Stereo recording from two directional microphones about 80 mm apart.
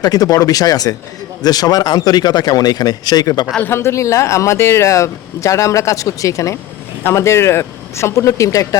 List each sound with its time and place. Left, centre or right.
0.0 s speech: left
3.6 s speech: left